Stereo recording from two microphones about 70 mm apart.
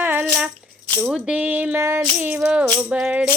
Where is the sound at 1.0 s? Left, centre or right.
Centre.